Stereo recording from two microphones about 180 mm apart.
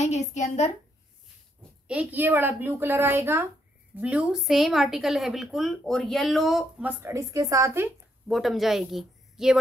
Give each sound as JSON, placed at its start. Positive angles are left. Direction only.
{"t": 0.0, "sound": "a woman's voice", "side_deg": 40}
{"t": 1.9, "sound": "a woman's voice", "side_deg": -10}
{"t": 8.3, "sound": "speech", "side_deg": 0}